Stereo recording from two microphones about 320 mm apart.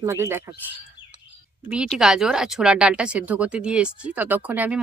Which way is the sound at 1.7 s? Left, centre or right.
Centre.